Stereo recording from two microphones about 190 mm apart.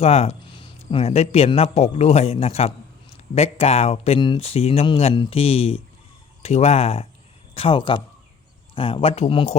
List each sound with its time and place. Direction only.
0.0 s speech: 35° left (ahead or behind)